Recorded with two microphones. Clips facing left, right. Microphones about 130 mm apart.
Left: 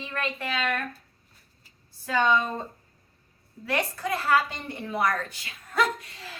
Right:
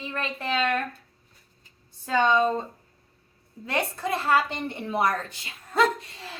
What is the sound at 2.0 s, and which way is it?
Speech, 20° right (ahead or behind).